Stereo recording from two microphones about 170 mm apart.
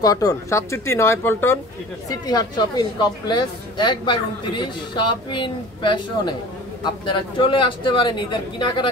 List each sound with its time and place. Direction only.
0.0 s a woman's voice: 20° left (ahead or behind)